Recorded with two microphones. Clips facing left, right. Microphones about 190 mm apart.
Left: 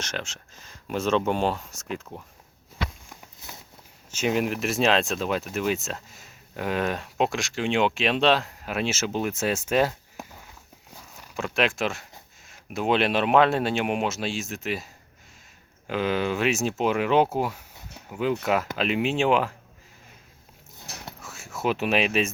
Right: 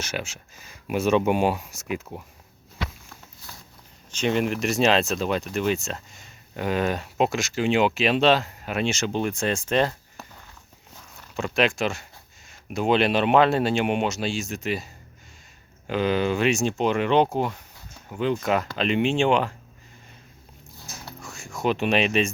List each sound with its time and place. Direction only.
0.0 s speech: 10° right (ahead or behind)
3.1 s a sound: 20° left (ahead or behind)
4.1 s speech: 5° left (ahead or behind)
11.3 s speech: centre (ahead or behind)
15.9 s speech: centre (ahead or behind)
21.2 s a sound: 5° left (ahead or behind)